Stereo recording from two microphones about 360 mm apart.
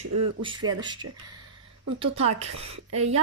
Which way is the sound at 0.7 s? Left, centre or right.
Centre.